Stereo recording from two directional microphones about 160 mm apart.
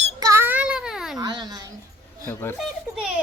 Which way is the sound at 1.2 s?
25° right (ahead or behind).